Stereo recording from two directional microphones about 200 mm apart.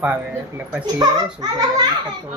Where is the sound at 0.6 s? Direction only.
20° right (ahead or behind).